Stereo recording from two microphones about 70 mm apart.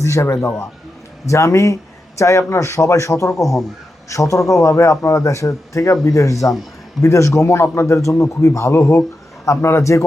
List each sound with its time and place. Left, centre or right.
0.0 s a man's voice: left